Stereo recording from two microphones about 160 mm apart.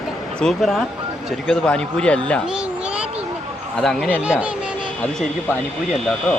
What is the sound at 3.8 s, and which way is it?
Speech, 5° left (ahead or behind).